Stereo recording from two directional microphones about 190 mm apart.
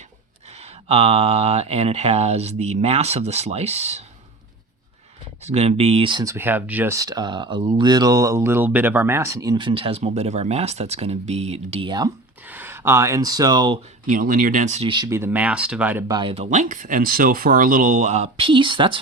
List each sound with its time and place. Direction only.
0.6 s speech: 30° right (ahead or behind)
5.4 s speech: 35° right (ahead or behind)
6.3 s speech: 10° right (ahead or behind)
12.5 s speech: 10° right (ahead or behind)
14.1 s speech: 45° right (ahead or behind); by 16.1 s 10° right (ahead or behind)
16.1 s speech: 30° right (ahead or behind)